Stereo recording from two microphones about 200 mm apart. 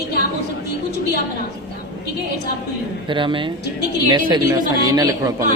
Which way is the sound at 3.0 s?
25° right (ahead or behind).